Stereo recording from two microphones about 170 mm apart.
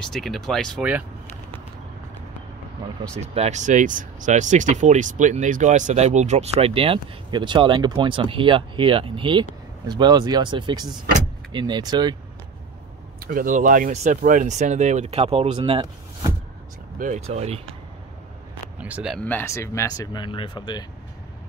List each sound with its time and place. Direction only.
0.0 s speech: centre (ahead or behind)
3.2 s speech: 40° right (ahead or behind); by 12.2 s 25° right (ahead or behind)
13.2 s speech: 55° right (ahead or behind); by 15.9 s 35° right (ahead or behind)
17.0 s speech: 45° right (ahead or behind)
18.8 s speech: 5° right (ahead or behind)
19.2 s speech: 15° left (ahead or behind)